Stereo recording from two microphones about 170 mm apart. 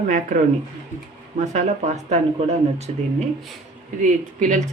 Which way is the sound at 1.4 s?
45° right (ahead or behind).